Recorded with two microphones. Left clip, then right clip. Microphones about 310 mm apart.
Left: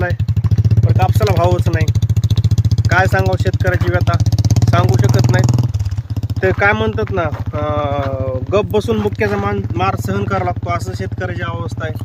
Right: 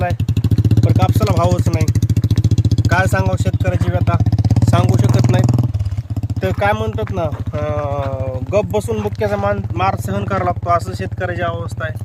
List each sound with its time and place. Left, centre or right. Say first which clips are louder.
0.4 s vehicle: right 4 dB; left
1.0 s a sound: left 3 dB; right
1.7 s vehicle: even; left
2.9 s vehicle: left 3 dB; right
4.2 s vehicle: even; centre
6.4 s vehicle: left 4 dB; right
8.4 s speech: left 1 dB; right
9.7 s speech: even; centre